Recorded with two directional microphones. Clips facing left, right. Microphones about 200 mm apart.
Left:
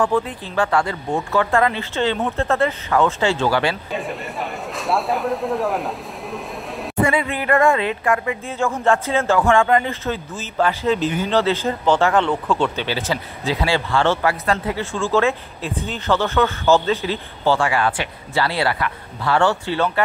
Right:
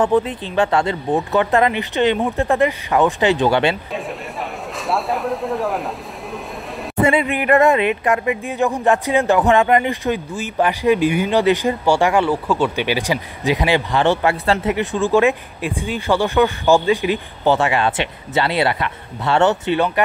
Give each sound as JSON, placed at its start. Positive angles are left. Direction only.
{"t": 0.0, "sound": "speech", "side_deg": -20}
{"t": 3.9, "sound": "speech", "side_deg": 0}
{"t": 7.0, "sound": "speech", "side_deg": -25}
{"t": 14.4, "sound": "speech", "side_deg": -25}